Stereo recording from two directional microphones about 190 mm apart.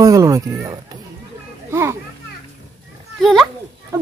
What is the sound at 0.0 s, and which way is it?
A child's voice, 15° right (ahead or behind).